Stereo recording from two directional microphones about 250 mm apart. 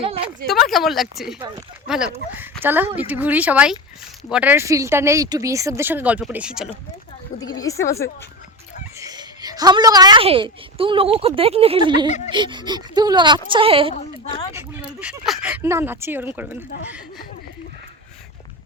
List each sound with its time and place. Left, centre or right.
0.0 s a sound: right
0.7 s speech: centre
7.4 s a woman's voice: centre
9.0 s a woman's voice: centre
13.9 s a woman's voice: centre
14.5 s speech: centre